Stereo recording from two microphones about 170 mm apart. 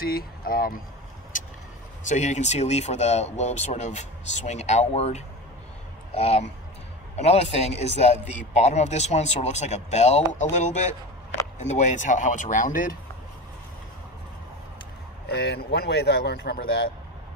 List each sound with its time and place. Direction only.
0.0 s speech: 60° left (ahead or behind)
2.0 s a man's voice: 45° left (ahead or behind)
15.2 s a man's voice: 70° left (ahead or behind)